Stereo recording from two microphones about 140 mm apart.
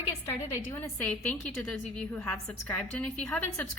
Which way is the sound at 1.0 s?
5° left (ahead or behind).